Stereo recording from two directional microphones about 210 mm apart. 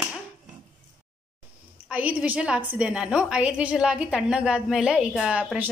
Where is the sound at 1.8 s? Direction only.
5° right (ahead or behind).